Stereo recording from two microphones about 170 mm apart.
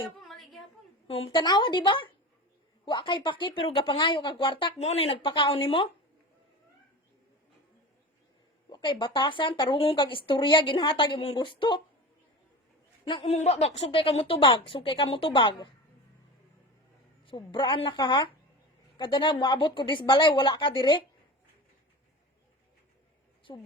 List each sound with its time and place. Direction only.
0.2 s a sound: centre (ahead or behind)
1.0 s speech: 35° left (ahead or behind)
8.7 s speech: 25° left (ahead or behind)
13.2 s speech: 40° left (ahead or behind)
17.2 s speech: 30° left (ahead or behind)
23.5 s speech: 25° left (ahead or behind)